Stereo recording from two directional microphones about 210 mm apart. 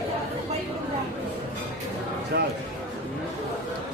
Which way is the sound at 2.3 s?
50° right (ahead or behind).